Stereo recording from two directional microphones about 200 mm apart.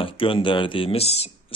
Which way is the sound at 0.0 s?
25° left (ahead or behind).